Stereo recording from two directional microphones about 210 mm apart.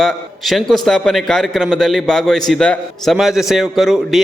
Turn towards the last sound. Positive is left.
turn(degrees=0)  # may be behind; listen again after turning